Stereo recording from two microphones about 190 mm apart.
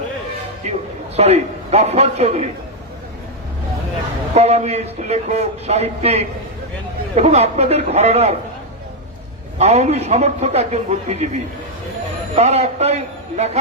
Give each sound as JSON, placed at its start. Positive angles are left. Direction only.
{"t": 0.6, "sound": "a man's voice", "side_deg": -35}
{"t": 4.4, "sound": "speech", "side_deg": -35}
{"t": 9.6, "sound": "speech", "side_deg": -35}
{"t": 12.4, "sound": "speech", "side_deg": -35}